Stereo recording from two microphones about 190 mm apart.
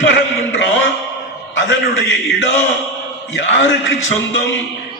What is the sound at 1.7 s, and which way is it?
A man's voice, 70° left (ahead or behind).